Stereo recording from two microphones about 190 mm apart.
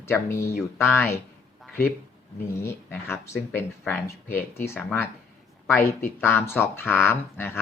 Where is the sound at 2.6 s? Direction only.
15° left (ahead or behind).